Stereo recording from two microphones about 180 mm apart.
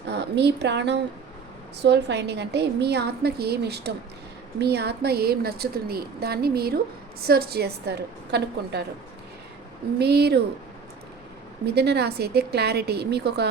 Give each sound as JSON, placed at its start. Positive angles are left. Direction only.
{"t": 0.1, "sound": "a woman's voice", "side_deg": -70}
{"t": 10.0, "sound": "a woman's voice", "side_deg": -65}
{"t": 11.6, "sound": "a woman's voice", "side_deg": -65}